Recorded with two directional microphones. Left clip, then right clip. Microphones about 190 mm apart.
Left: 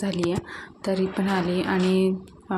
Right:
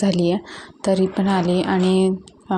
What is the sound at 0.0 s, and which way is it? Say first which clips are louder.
A woman's voice: right 6 dB; 25° right (ahead or behind).